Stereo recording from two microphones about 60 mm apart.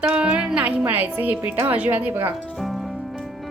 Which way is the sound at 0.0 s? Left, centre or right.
Centre.